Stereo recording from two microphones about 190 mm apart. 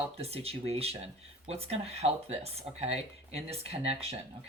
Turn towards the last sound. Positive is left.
turn(degrees=-30)  # may be behind; listen again after turning